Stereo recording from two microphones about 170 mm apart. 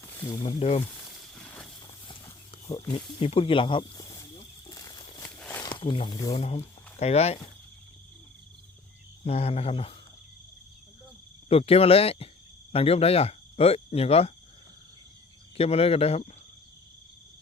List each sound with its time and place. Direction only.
0.4 s speech: 35° left (ahead or behind)
1.0 s a sound: 5° left (ahead or behind)
2.0 s a sound: 30° left (ahead or behind)
2.9 s speech: 35° left (ahead or behind)
4.4 s snake: 20° left (ahead or behind)
5.4 s a sound: 15° left (ahead or behind)
5.6 s speech: 30° left (ahead or behind)
6.3 s speech: 35° left (ahead or behind)
9.2 s speech: 35° left (ahead or behind)
11.4 s speech: 35° left (ahead or behind)
15.5 s speech: 35° left (ahead or behind)